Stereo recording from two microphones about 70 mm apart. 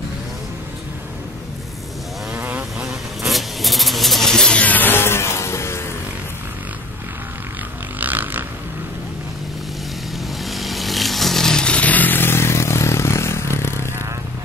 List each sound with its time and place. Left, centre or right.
2.3 s vehicle: right
3.3 s vehicle: centre; by 5.9 s left
8.0 s a sound: right
10.4 s motorcycle: centre; by 13.8 s left